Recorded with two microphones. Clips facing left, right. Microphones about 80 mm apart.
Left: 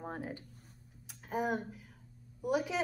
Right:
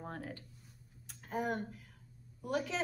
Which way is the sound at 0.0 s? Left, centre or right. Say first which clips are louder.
Left 3 dB; centre.